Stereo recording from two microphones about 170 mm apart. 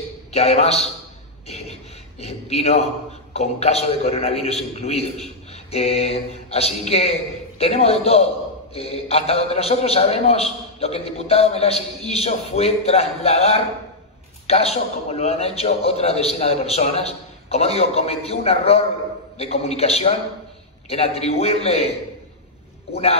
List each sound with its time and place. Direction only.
0.3 s a man's voice: 40° left (ahead or behind)